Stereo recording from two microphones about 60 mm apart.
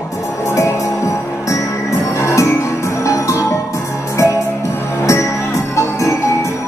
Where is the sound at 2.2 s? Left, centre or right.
Left.